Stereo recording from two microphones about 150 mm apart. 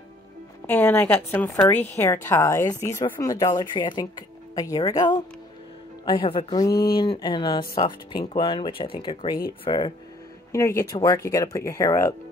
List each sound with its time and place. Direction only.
0.7 s a woman's voice: 15° left (ahead or behind); by 9.9 s 35° left (ahead or behind)
10.5 s speech: 20° left (ahead or behind)